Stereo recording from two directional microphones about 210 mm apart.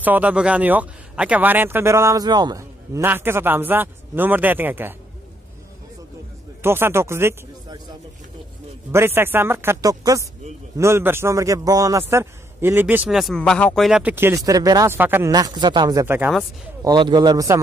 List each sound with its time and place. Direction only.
0.0 s a man's voice: 5° right (ahead or behind)
6.6 s speech: 10° right (ahead or behind)
8.9 s a man's voice: 10° right (ahead or behind)
16.8 s a man's voice: 20° right (ahead or behind)